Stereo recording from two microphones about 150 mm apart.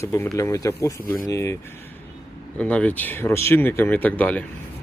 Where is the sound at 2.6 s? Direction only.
10° left (ahead or behind).